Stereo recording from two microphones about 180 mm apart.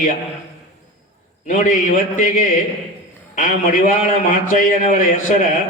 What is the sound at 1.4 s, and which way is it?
A man's voice, 45° left (ahead or behind).